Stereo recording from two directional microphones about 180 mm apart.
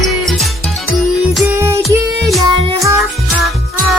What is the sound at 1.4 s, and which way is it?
Music, 15° right (ahead or behind).